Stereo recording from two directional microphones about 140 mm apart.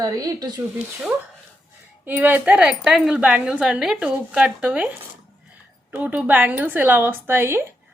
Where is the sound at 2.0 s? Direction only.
10° right (ahead or behind).